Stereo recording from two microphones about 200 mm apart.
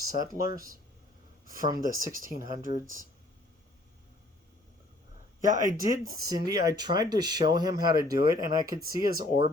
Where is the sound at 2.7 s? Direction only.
50° left (ahead or behind).